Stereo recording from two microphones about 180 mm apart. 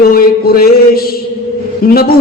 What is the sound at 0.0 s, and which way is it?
A man's voice, 55° left (ahead or behind).